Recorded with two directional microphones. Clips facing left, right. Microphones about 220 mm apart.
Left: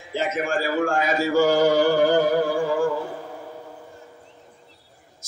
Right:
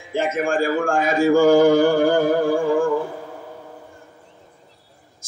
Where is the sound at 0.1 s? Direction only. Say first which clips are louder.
Right 3 dB; 50° right (ahead or behind).